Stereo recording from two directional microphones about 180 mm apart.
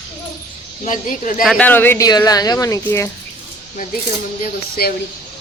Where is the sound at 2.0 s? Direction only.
20° left (ahead or behind).